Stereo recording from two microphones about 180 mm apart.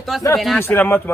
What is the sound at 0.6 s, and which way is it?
Speech, 10° left (ahead or behind).